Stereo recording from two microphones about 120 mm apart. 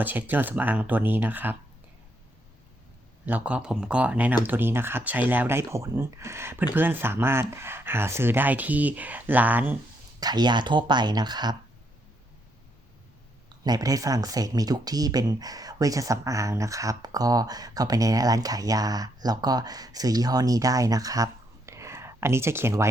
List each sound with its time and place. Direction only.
0.0 s speech: 15° right (ahead or behind)
3.2 s speech: 10° right (ahead or behind)
10.2 s speech: 35° right (ahead or behind)
13.7 s speech: 30° right (ahead or behind)
21.7 s a sound: 25° right (ahead or behind)